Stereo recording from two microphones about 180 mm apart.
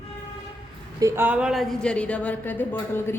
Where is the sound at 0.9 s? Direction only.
15° right (ahead or behind).